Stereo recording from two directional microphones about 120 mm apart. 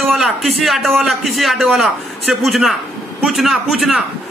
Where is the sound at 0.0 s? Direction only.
Centre (ahead or behind).